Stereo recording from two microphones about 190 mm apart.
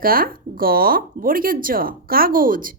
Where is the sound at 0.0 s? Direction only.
50° right (ahead or behind).